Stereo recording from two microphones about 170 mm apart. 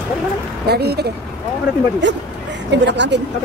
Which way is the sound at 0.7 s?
70° right (ahead or behind).